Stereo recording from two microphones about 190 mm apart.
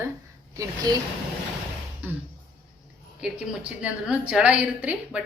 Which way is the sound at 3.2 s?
5° right (ahead or behind).